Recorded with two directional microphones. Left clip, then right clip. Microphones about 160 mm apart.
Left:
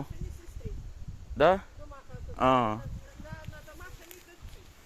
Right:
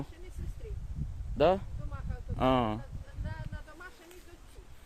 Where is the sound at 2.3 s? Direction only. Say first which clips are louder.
Left 4 dB; 15° right (ahead or behind).